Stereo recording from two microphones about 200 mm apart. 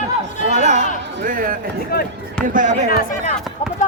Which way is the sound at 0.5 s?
35° right (ahead or behind).